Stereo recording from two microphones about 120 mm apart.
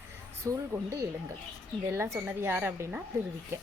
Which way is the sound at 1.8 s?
20° right (ahead or behind).